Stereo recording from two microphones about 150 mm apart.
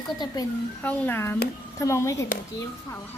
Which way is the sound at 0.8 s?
10° left (ahead or behind).